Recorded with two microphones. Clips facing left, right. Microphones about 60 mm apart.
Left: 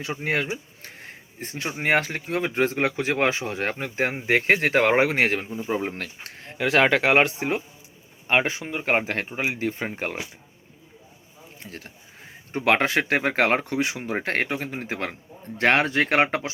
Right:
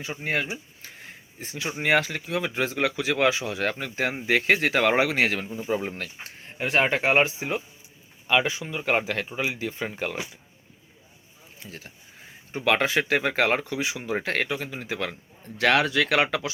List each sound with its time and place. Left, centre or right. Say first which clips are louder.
0.0 s speech: left 2 dB; left
6.2 s speech: left 6 dB; left
8.3 s speech: left 1 dB; left
11.6 s speech: left 1 dB; left